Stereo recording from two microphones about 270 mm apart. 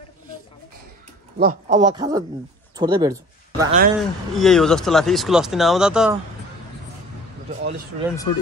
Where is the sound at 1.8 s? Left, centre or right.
Centre.